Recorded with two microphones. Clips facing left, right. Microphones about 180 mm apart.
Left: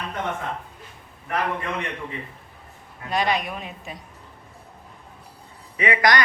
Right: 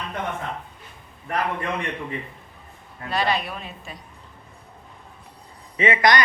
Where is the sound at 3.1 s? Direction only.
15° left (ahead or behind).